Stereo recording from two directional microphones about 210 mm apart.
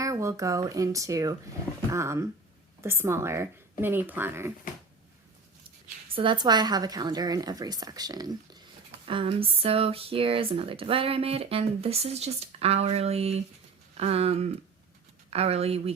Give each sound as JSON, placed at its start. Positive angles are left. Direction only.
{"t": 0.0, "sound": "speech", "side_deg": -15}
{"t": 6.1, "sound": "speech", "side_deg": -20}